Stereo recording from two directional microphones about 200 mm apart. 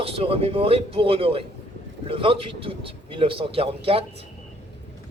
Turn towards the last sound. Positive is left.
turn(degrees=-30)  # may be behind; listen again after turning